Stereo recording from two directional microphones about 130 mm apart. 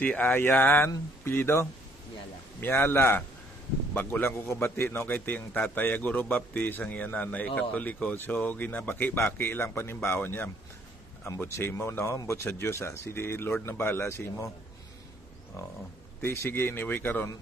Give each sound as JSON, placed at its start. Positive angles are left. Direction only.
{"t": 0.0, "sound": "a man's voice", "side_deg": 10}
{"t": 16.2, "sound": "a man's voice", "side_deg": 15}